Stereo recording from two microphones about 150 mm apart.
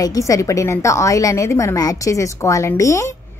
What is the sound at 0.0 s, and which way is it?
A woman's voice, 25° left (ahead or behind).